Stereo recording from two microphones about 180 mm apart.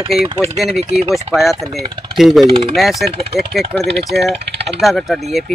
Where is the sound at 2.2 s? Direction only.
Centre (ahead or behind).